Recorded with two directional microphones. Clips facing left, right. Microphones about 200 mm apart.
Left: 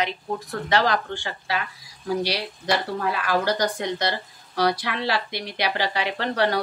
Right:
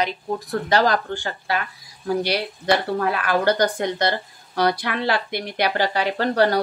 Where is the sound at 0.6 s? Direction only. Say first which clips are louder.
Right 2 dB; 40° right (ahead or behind).